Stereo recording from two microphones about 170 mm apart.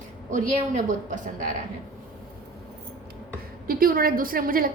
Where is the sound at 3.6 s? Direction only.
60° right (ahead or behind).